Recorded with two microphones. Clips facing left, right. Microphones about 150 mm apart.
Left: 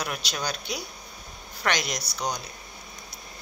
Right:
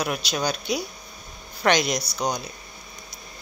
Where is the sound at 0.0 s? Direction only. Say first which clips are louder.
Right 6 dB; 15° right (ahead or behind).